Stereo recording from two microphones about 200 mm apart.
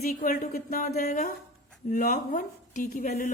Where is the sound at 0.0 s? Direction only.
45° left (ahead or behind).